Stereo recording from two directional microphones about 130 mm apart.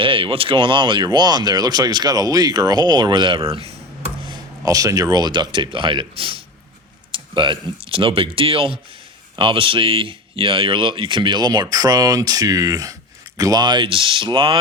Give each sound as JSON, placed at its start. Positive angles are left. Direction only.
{"t": 0.0, "sound": "speech", "side_deg": -45}
{"t": 4.3, "sound": "speech", "side_deg": -30}